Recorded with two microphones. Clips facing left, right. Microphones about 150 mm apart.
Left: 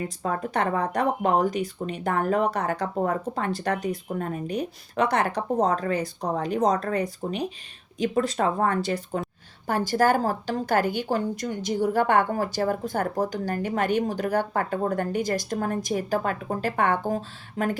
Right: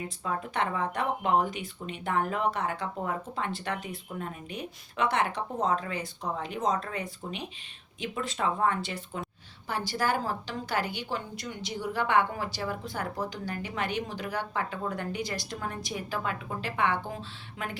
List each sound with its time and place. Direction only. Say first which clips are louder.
0.2 s a woman's voice: left 4 dB; 45° left (ahead or behind)